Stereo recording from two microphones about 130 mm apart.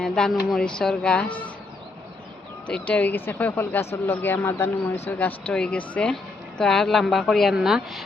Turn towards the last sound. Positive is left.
turn(degrees=-5)  # may be behind; listen again after turning